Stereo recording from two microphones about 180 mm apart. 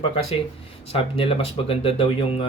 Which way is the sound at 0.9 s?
30° left (ahead or behind).